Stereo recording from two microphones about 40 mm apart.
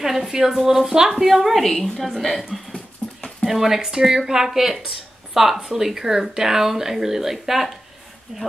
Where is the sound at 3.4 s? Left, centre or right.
Centre.